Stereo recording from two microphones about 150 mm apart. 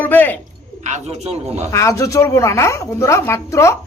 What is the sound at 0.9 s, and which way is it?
Speech, 45° right (ahead or behind).